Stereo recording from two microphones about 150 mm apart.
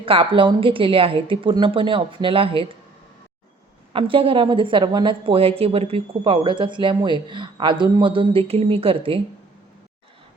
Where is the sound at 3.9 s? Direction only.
35° right (ahead or behind).